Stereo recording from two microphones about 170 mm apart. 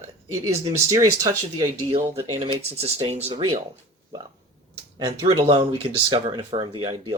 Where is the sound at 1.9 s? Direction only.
35° right (ahead or behind).